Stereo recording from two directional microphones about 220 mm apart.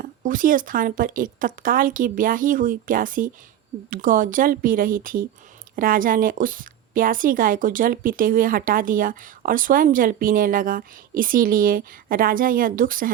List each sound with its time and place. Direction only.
0.0 s a woman's voice: 35° right (ahead or behind)